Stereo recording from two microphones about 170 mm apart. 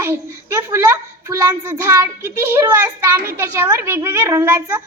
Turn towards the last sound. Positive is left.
turn(degrees=-15)  # may be behind; listen again after turning